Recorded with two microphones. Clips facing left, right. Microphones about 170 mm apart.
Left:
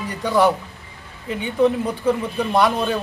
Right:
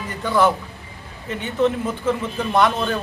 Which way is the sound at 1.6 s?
15° left (ahead or behind).